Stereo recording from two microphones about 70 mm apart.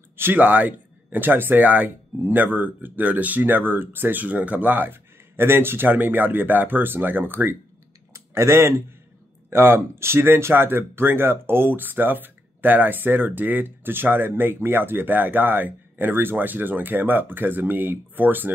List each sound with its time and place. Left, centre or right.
0.1 s a sound: right
0.4 s speech: right
8.1 s speech: right